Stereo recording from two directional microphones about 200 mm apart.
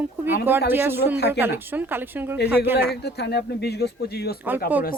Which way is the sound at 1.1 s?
55° left (ahead or behind).